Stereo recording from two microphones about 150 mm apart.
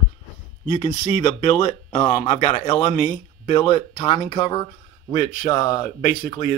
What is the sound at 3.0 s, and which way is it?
Speech, 40° left (ahead or behind).